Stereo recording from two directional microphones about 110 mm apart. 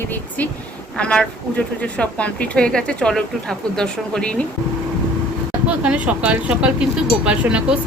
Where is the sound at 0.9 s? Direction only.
10° left (ahead or behind).